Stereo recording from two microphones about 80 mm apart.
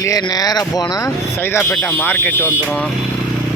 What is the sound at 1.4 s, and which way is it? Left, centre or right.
Speech, left.